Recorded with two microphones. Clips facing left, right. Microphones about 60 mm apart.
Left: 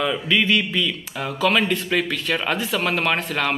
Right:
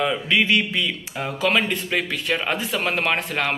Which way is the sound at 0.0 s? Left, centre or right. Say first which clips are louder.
Even; right.